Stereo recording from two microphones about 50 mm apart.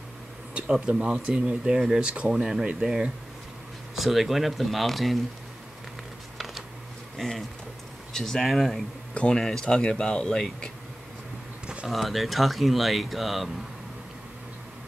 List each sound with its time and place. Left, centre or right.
0.6 s speech: centre
3.9 s speech: centre
6.3 s a sound: centre
7.2 s speech: centre
11.6 s a sound: centre
11.9 s speech: centre